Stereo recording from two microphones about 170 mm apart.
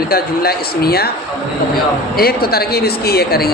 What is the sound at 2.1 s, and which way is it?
Speech, 65° left (ahead or behind).